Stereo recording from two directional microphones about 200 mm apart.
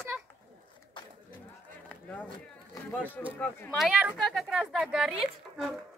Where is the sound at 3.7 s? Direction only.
5° right (ahead or behind).